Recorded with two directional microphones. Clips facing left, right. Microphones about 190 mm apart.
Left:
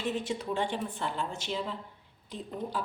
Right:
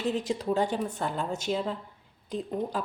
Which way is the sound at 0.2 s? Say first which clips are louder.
Right 4 dB; 35° right (ahead or behind).